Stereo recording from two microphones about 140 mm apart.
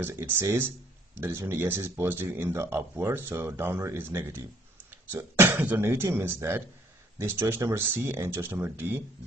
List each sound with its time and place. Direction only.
0.0 s speech: 15° right (ahead or behind)